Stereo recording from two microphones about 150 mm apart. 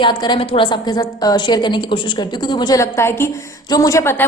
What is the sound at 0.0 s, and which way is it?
A woman's voice, 30° left (ahead or behind).